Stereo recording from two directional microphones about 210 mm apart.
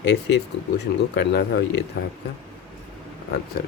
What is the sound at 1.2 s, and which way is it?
Speech, 50° left (ahead or behind).